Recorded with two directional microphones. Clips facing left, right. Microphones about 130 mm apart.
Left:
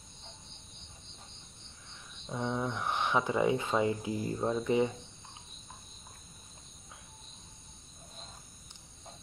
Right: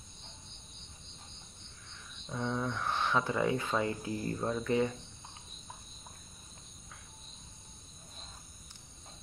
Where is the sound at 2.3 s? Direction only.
20° left (ahead or behind).